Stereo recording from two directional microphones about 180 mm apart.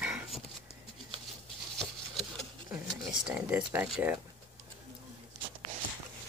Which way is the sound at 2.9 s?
Centre (ahead or behind).